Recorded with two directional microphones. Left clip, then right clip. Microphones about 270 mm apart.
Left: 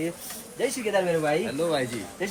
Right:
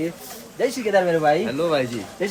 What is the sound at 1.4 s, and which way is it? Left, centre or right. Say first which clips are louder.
Speech: right 5 dB; right.